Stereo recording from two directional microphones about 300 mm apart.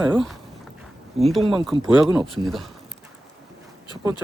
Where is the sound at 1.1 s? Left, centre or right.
Right.